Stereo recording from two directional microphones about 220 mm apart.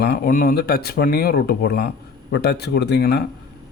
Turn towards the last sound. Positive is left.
turn(degrees=50)  # may be behind; listen again after turning